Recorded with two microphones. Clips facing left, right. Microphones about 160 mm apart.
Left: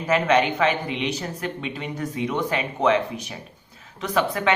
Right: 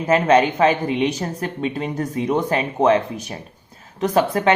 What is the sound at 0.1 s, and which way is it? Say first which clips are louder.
Speech: right 4 dB; 40° right (ahead or behind).